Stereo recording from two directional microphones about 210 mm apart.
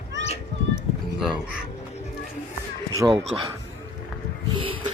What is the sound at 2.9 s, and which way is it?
Speech, 20° right (ahead or behind).